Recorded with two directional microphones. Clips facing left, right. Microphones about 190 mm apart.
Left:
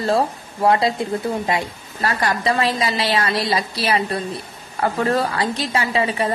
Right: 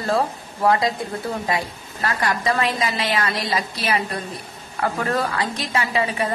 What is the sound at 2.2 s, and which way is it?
A woman's voice, 30° left (ahead or behind).